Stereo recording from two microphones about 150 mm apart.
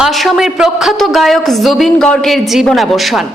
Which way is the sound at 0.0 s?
Centre (ahead or behind).